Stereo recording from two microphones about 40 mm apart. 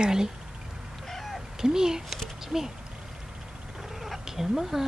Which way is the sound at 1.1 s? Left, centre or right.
Centre.